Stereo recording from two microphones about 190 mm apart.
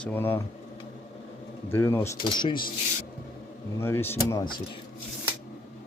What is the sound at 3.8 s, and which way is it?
Speech, 10° left (ahead or behind).